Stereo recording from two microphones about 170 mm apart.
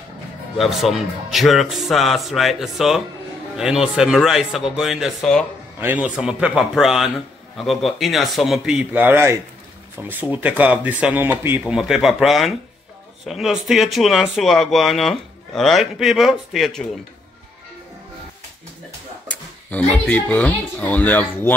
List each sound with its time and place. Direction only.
0.6 s speech: centre (ahead or behind)
5.8 s speech: 10° right (ahead or behind)
19.2 s speech: 10° left (ahead or behind)